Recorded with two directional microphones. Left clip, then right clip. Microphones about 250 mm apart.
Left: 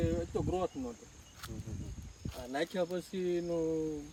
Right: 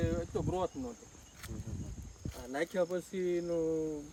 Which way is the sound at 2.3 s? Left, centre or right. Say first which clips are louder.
Right 1 dB; centre.